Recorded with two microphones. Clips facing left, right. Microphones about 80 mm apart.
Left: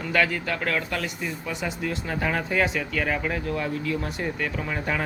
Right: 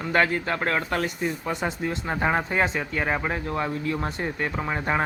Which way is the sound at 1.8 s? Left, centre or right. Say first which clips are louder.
Right 1 dB; right.